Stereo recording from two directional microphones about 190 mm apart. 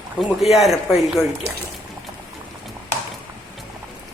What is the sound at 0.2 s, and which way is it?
A man's voice, centre (ahead or behind).